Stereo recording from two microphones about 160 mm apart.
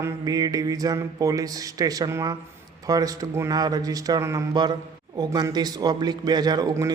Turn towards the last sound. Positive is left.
turn(degrees=-25)  # may be behind; listen again after turning